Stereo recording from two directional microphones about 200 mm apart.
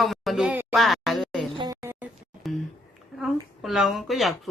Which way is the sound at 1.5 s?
20° right (ahead or behind).